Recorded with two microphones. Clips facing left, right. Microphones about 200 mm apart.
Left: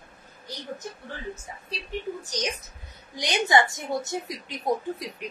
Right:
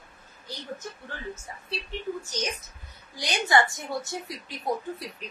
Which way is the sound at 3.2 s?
20° left (ahead or behind).